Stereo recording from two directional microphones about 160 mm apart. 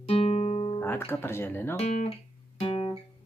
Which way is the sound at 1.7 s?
40° left (ahead or behind).